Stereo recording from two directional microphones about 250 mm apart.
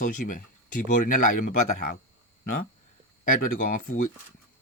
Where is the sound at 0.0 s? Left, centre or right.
Left.